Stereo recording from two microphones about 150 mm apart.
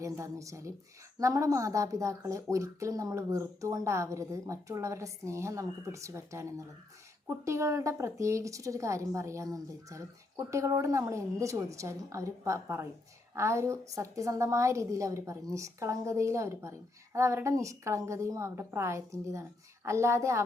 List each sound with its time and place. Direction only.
0.0 s a woman's voice: 20° right (ahead or behind)